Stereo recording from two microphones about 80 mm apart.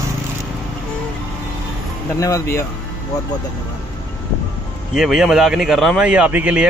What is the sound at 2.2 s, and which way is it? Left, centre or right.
Speech, left.